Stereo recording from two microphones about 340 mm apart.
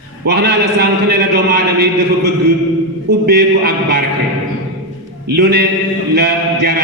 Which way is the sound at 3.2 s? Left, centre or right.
Right.